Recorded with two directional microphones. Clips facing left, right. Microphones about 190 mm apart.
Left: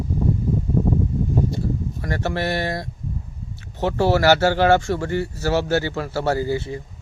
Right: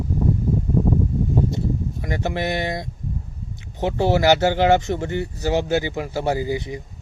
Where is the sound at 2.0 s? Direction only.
15° right (ahead or behind).